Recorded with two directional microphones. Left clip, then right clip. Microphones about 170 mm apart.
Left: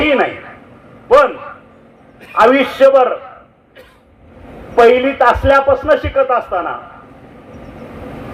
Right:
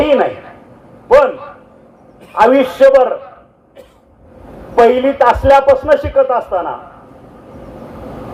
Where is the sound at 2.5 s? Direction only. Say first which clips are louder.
Right 1 dB; 20° left (ahead or behind).